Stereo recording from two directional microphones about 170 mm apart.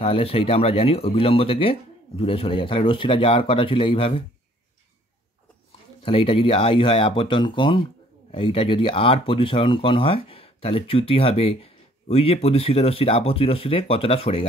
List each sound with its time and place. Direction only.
0.0 s speech: 35° left (ahead or behind)
6.0 s speech: 30° left (ahead or behind)